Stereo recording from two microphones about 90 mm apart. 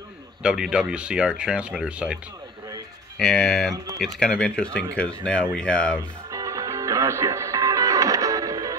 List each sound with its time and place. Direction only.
0.4 s speech: 10° right (ahead or behind)
3.2 s speech: 5° left (ahead or behind)
6.3 s music: 35° right (ahead or behind)